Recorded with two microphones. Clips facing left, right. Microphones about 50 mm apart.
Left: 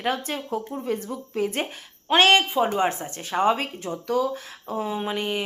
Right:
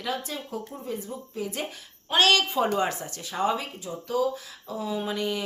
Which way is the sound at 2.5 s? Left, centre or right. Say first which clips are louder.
Left 2 dB; centre.